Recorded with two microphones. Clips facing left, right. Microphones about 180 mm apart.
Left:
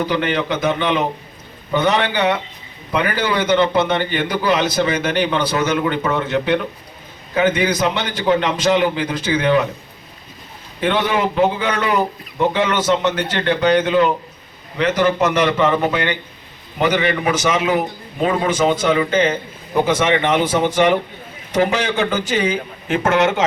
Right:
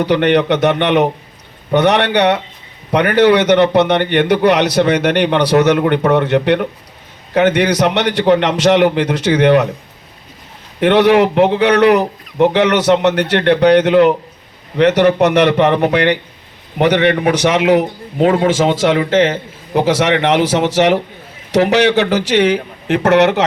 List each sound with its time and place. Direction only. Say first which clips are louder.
0.0 s a man's voice: right 7 dB; 70° right (ahead or behind)
10.8 s a man's voice: right 9 dB; 70° right (ahead or behind)